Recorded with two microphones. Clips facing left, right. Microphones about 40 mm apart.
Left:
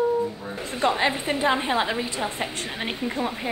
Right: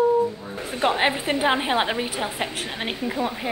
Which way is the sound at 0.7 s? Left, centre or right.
Right.